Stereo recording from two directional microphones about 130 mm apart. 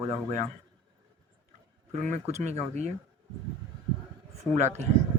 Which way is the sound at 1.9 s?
65° right (ahead or behind).